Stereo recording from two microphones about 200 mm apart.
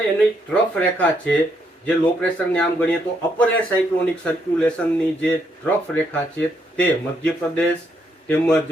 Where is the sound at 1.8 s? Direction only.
5° left (ahead or behind).